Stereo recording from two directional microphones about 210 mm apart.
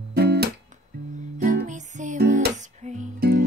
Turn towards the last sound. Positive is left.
turn(degrees=-50)  # may be behind; listen again after turning